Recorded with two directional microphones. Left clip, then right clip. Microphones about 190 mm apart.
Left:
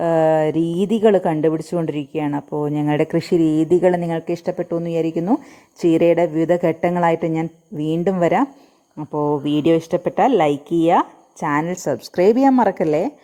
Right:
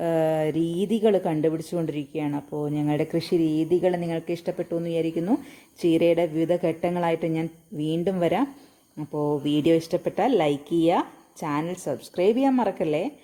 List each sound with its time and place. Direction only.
0.0 s a woman's voice: 20° left (ahead or behind)